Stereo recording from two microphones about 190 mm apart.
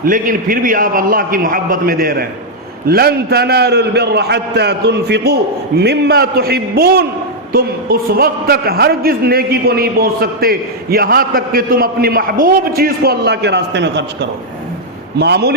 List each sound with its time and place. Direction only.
0.0 s a man's voice: 45° right (ahead or behind)